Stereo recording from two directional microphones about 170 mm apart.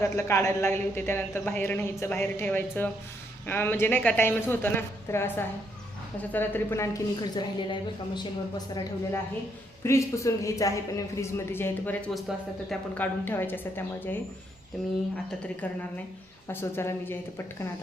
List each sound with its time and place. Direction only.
0.0 s a woman's voice: 15° left (ahead or behind)
15.6 s a woman's voice: 10° left (ahead or behind)